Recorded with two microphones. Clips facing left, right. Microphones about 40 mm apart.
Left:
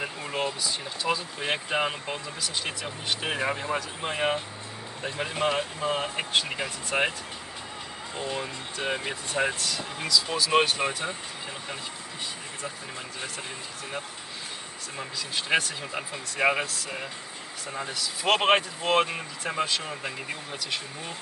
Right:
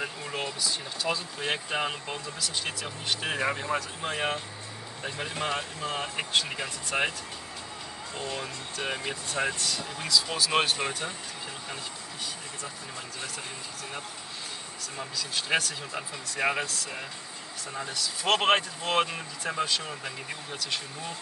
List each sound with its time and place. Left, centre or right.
0.0 s speech: centre
8.2 s speech: centre
10.0 s speech: centre
10.9 s speech: left
15.0 s speech: centre